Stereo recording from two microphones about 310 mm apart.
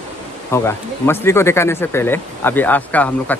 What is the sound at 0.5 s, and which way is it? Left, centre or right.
Speech, centre.